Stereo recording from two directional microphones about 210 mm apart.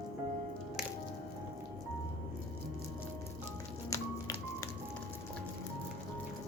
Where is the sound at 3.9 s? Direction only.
15° left (ahead or behind).